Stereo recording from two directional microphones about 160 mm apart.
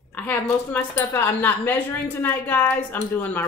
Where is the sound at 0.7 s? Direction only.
15° left (ahead or behind).